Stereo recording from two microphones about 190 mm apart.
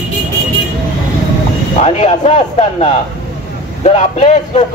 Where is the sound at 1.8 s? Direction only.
35° left (ahead or behind).